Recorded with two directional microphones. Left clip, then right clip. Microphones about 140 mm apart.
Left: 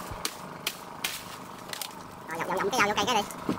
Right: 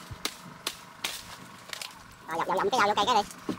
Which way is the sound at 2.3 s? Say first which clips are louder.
Right 2 dB; 5° right (ahead or behind).